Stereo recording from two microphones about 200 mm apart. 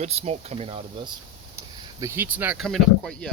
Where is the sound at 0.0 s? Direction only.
30° right (ahead or behind).